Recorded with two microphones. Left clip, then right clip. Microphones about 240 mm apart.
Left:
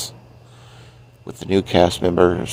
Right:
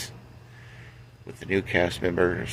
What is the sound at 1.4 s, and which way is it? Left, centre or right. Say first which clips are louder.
Speech: left 8 dB; left.